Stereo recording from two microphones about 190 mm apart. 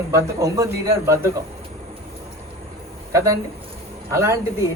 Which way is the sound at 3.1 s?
15° right (ahead or behind).